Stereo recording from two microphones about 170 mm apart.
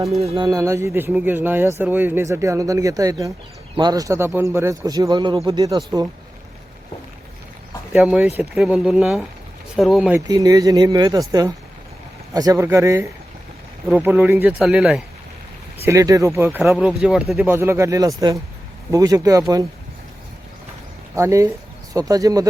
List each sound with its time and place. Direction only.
0.2 s speech: 35° right (ahead or behind)
0.4 s speech: 20° right (ahead or behind)
7.9 s speech: 5° right (ahead or behind)
10.1 s speech: 20° right (ahead or behind); by 15.0 s 5° right (ahead or behind)
15.8 s speech: 20° right (ahead or behind)
21.2 s speech: 15° right (ahead or behind)